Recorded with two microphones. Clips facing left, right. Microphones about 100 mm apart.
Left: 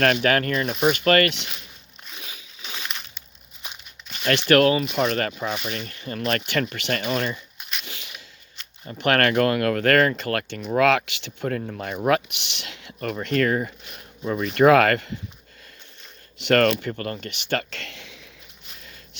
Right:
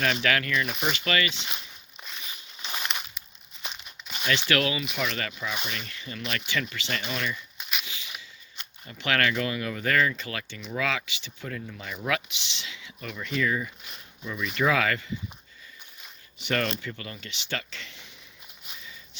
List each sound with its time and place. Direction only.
0.2 s speech: 45° left (ahead or behind); by 1.5 s 65° left (ahead or behind)
2.6 s a sound: centre (ahead or behind)
4.3 s speech: 50° left (ahead or behind)
7.6 s biting: 5° right (ahead or behind)
7.9 s a sound: 55° left (ahead or behind)
9.0 s speech: 50° left (ahead or behind)
16.4 s speech: 80° left
16.8 s speech: 50° left (ahead or behind); by 18.2 s 90° left
18.8 s a sound: 60° left (ahead or behind)